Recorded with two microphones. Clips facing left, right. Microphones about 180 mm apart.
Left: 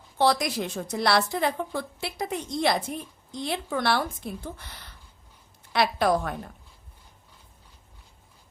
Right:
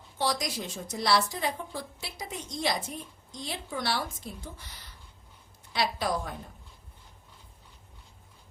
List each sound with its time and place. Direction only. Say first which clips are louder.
0.2 s a woman's voice: left 7 dB; 60° left (ahead or behind)